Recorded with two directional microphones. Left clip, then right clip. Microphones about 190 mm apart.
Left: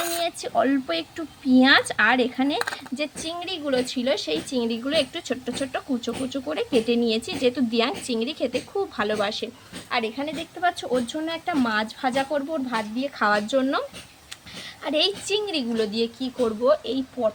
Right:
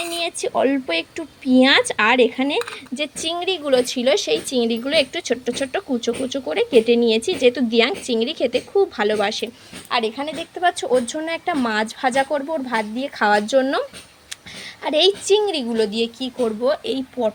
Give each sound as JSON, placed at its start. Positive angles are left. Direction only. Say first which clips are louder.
{"t": 0.2, "sound": "a woman's voice", "louder": "right 5 dB", "side_deg": -10}
{"t": 3.2, "sound": "a woman's voice", "louder": "right 8 dB", "side_deg": -25}
{"t": 14.8, "sound": "a woman's voice", "louder": "right 7 dB", "side_deg": -15}